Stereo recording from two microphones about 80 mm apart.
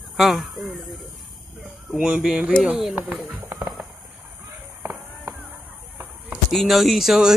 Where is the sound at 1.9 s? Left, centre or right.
Centre.